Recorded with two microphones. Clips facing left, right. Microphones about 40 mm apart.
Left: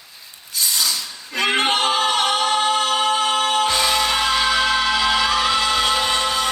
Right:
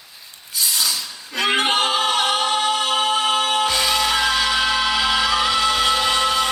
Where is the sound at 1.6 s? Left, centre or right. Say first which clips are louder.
Even; centre.